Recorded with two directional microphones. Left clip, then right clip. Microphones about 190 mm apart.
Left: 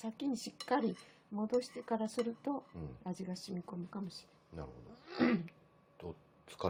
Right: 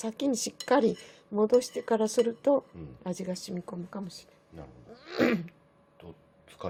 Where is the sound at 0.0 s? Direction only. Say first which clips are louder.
Right 10 dB; 45° right (ahead or behind).